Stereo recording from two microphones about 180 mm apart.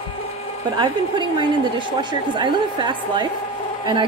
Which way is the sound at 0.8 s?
25° right (ahead or behind).